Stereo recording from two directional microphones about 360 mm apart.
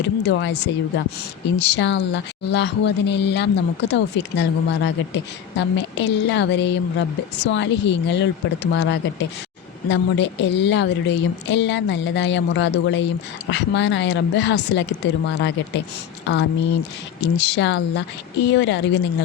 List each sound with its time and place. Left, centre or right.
0.3 s a woman's voice: left